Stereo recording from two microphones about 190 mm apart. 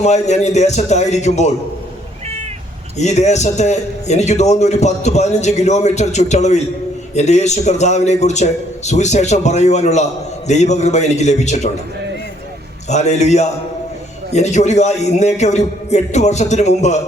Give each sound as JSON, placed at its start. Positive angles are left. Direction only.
{"t": 0.0, "sound": "a man's voice", "side_deg": 35}
{"t": 3.0, "sound": "a man's voice", "side_deg": 35}
{"t": 12.9, "sound": "a man's voice", "side_deg": 35}